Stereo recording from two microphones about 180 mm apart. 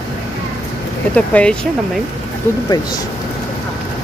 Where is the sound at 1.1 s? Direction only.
5° left (ahead or behind).